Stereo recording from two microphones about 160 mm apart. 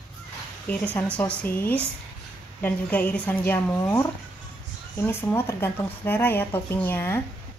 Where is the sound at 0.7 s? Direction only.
10° left (ahead or behind).